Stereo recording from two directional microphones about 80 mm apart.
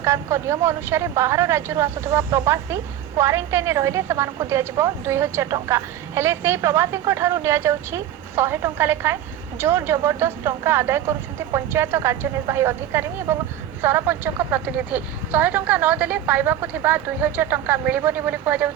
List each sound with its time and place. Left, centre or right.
0.0 s speech: right